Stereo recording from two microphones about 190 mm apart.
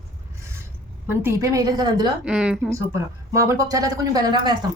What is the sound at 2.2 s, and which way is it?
Speech, 5° right (ahead or behind).